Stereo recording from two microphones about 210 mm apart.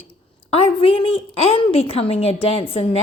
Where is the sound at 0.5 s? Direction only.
30° left (ahead or behind).